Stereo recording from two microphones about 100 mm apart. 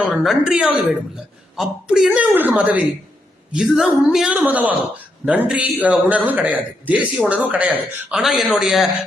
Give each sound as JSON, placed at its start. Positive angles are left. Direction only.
{"t": 0.3, "sound": "a woman's voice", "side_deg": -5}
{"t": 2.0, "sound": "a man's voice", "side_deg": -15}
{"t": 3.5, "sound": "a woman's voice", "side_deg": -5}
{"t": 8.2, "sound": "a woman's voice", "side_deg": 0}